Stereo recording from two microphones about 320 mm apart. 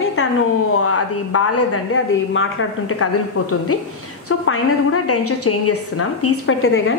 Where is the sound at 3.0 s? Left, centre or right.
Left.